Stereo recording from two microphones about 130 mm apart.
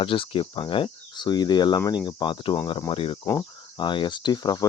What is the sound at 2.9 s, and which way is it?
Speech, 45° left (ahead or behind).